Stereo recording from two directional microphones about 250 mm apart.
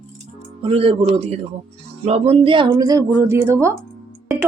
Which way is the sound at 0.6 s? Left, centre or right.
Right.